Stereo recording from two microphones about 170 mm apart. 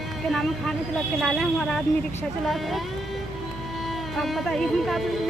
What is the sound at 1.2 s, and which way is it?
Speech, centre (ahead or behind).